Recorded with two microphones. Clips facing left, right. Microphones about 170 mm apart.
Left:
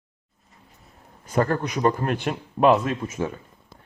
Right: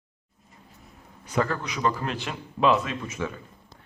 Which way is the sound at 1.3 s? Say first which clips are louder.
Left 4 dB; 50° left (ahead or behind).